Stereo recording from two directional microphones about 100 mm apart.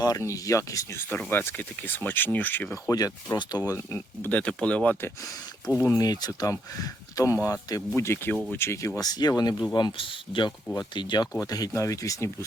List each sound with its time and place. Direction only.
0.0 s speech: 35° left (ahead or behind); by 5.1 s 20° left (ahead or behind)
5.2 s speech: 35° left (ahead or behind)
9.0 s speech: 40° left (ahead or behind)
9.7 s speech: 55° left (ahead or behind)
11.3 s speech: 40° left (ahead or behind)